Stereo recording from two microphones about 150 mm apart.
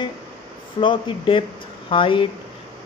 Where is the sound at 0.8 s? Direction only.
35° left (ahead or behind).